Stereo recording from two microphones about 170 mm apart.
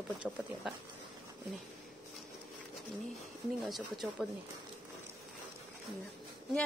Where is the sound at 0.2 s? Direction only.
Centre (ahead or behind).